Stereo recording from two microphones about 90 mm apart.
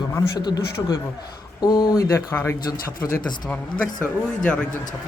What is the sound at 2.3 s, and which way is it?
Speech, 20° left (ahead or behind).